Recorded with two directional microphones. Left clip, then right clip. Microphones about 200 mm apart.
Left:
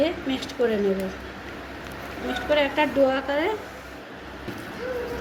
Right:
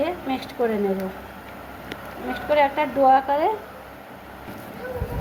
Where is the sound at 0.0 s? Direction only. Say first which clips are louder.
Even; 45° right (ahead or behind).